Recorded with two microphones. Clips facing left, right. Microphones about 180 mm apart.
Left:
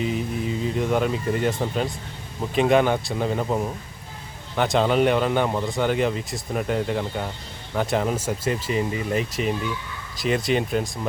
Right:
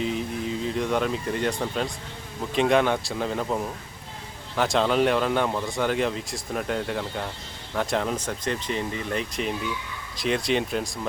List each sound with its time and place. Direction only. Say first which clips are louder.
0.0 s speech: left 2 dB; 5° left (ahead or behind)